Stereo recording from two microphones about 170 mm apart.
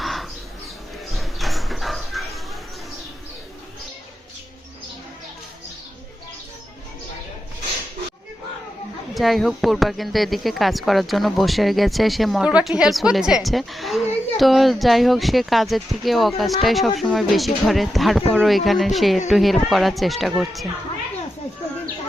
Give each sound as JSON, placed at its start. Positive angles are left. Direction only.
{"t": 0.0, "sound": "bird", "side_deg": 0}
{"t": 1.1, "sound": "a sound", "side_deg": 0}
{"t": 9.1, "sound": "speech", "side_deg": 0}